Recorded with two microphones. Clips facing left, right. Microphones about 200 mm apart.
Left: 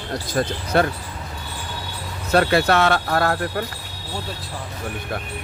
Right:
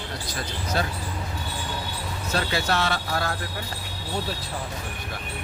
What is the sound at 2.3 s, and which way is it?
Speech, 60° left (ahead or behind).